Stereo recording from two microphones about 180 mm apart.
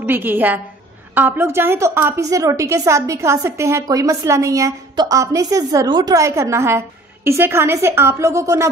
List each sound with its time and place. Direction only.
0.0 s a woman's voice: 10° right (ahead or behind)